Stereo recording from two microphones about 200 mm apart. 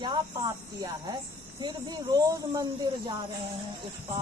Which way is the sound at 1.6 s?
20° right (ahead or behind).